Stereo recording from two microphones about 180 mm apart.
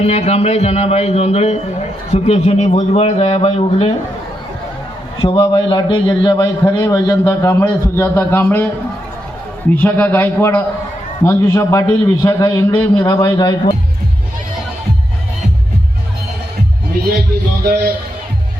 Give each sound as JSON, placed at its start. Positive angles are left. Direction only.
{"t": 0.0, "sound": "a man's voice", "side_deg": 35}
{"t": 5.2, "sound": "a man's voice", "side_deg": 25}
{"t": 9.7, "sound": "a man's voice", "side_deg": 10}